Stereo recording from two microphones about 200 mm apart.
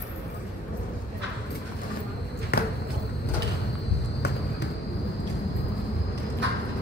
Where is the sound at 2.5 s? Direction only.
50° left (ahead or behind).